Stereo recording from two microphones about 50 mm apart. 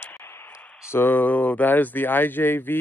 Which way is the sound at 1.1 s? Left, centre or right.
Left.